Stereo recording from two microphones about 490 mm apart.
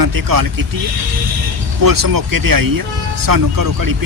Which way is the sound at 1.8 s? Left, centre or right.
Right.